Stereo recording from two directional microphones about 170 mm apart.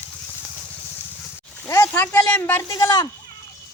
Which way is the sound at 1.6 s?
15° left (ahead or behind).